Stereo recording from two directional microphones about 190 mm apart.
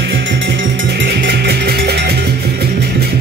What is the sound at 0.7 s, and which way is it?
Music, 60° right (ahead or behind).